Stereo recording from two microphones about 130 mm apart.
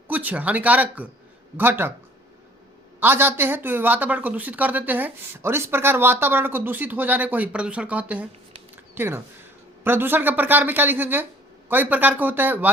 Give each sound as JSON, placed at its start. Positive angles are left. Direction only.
{"t": 0.1, "sound": "speech", "side_deg": -10}
{"t": 3.0, "sound": "speech", "side_deg": -15}
{"t": 8.7, "sound": "a sound", "side_deg": -15}
{"t": 9.8, "sound": "speech", "side_deg": -15}